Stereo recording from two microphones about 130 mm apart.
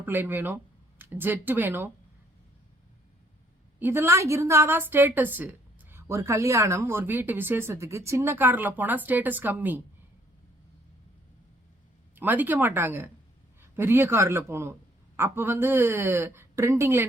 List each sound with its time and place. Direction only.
0.0 s speech: 15° right (ahead or behind)
3.8 s a woman's voice: 15° right (ahead or behind)
12.1 s a woman's voice: 15° right (ahead or behind)